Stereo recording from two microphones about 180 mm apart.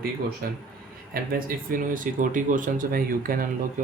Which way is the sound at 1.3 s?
50° right (ahead or behind).